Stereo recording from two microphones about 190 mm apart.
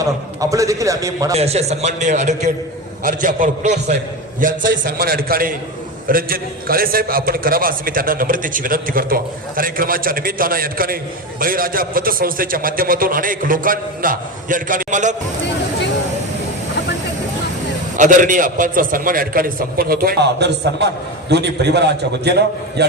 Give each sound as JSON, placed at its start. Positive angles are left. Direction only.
{"t": 0.0, "sound": "a man's voice", "side_deg": -15}
{"t": 1.3, "sound": "a man's voice", "side_deg": -35}
{"t": 17.9, "sound": "a man's voice", "side_deg": -40}